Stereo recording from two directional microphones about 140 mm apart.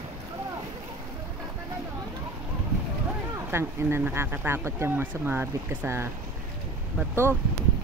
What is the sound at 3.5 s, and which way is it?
Speech, 15° right (ahead or behind).